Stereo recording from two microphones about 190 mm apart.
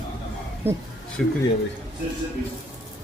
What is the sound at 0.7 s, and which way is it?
Speech, 10° right (ahead or behind).